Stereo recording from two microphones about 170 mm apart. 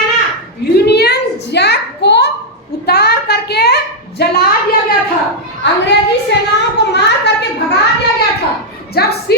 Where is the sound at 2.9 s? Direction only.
70° left (ahead or behind).